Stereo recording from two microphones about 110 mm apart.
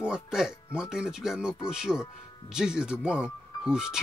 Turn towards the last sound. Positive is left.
turn(degrees=-5)  # may be behind; listen again after turning